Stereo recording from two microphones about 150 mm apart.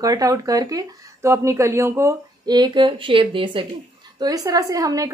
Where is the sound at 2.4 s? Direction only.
30° right (ahead or behind).